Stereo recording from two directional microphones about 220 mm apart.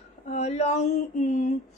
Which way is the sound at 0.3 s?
30° left (ahead or behind).